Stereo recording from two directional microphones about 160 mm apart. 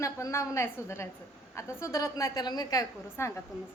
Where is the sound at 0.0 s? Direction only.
20° left (ahead or behind).